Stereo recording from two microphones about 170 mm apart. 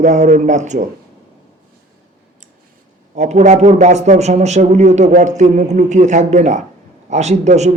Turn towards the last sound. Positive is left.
turn(degrees=-40)  # may be behind; listen again after turning